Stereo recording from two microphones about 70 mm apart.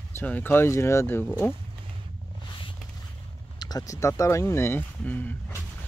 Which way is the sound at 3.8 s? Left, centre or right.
Left.